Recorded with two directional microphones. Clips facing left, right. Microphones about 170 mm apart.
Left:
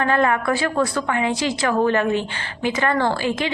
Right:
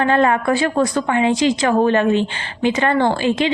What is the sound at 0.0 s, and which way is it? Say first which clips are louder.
A woman's voice: right 3 dB; 25° right (ahead or behind).